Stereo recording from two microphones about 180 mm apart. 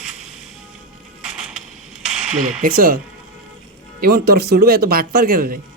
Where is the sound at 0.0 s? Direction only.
5° right (ahead or behind).